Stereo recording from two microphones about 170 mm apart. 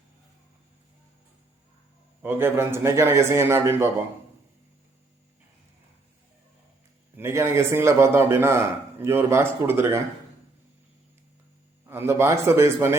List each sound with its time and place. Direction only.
2.2 s a man's voice: 15° right (ahead or behind)
7.2 s a man's voice: 15° right (ahead or behind)
11.9 s a man's voice: 15° right (ahead or behind)